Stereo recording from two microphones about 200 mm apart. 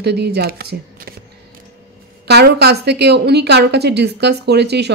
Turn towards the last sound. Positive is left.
turn(degrees=-55)  # may be behind; listen again after turning